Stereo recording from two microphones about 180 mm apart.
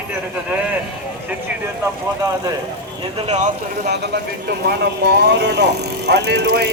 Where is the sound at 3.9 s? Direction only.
60° right (ahead or behind).